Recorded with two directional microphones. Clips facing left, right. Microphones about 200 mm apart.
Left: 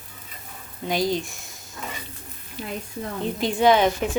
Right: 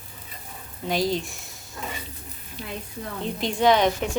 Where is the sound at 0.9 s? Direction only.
Centre (ahead or behind).